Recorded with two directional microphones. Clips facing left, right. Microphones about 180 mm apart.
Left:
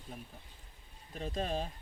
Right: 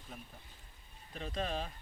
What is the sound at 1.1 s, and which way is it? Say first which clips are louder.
Speech: left 2 dB; 40° left (ahead or behind).